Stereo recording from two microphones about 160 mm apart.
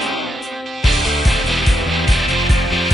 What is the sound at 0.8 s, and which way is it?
Music, centre (ahead or behind).